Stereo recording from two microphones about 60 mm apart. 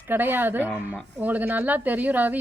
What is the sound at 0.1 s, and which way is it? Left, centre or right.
A woman's voice, right.